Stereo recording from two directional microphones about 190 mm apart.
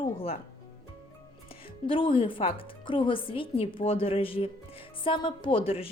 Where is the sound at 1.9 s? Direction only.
25° left (ahead or behind).